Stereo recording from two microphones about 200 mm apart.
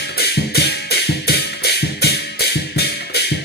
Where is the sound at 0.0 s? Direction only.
55° left (ahead or behind).